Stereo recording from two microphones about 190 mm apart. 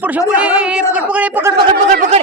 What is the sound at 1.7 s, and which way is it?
Speech, 40° right (ahead or behind).